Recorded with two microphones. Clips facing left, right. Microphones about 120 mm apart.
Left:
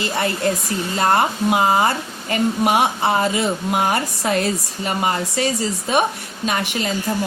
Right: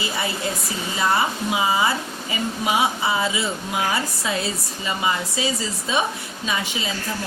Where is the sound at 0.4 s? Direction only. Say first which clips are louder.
Left 6 dB; 65° left (ahead or behind).